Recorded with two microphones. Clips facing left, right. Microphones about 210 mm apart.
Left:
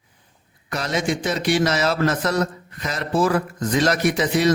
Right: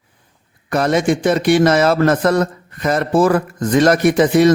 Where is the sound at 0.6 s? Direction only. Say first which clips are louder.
Right 8 dB; 55° right (ahead or behind).